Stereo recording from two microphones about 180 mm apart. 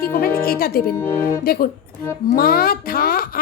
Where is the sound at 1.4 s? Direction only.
55° left (ahead or behind).